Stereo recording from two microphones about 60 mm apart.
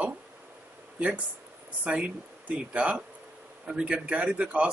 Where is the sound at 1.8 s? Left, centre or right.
Centre.